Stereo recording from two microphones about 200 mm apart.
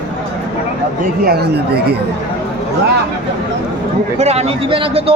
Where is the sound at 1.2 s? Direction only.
55° right (ahead or behind).